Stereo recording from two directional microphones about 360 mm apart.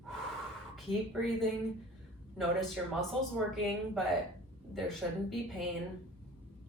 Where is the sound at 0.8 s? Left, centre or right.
Centre.